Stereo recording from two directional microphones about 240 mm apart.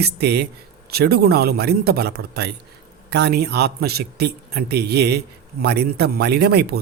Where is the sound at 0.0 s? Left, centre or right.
Right.